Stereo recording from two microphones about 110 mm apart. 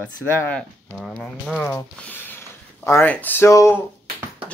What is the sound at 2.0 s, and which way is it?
Speech, 20° left (ahead or behind).